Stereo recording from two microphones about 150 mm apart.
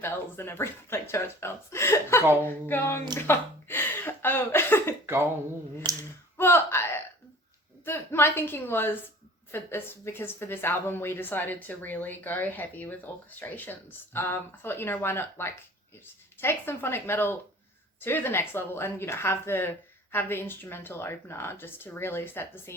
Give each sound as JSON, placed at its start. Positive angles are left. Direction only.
{"t": 0.0, "sound": "a woman's voice", "side_deg": 15}
{"t": 5.8, "sound": "finger snapping", "side_deg": -30}
{"t": 6.3, "sound": "a sound", "side_deg": 15}
{"t": 7.9, "sound": "a woman's voice", "side_deg": 15}